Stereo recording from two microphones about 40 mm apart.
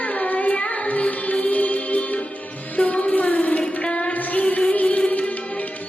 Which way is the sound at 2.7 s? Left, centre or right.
Left.